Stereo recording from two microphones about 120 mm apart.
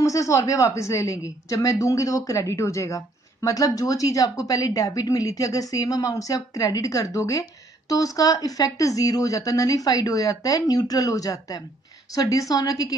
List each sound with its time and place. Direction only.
0.0 s a woman's voice: 25° left (ahead or behind)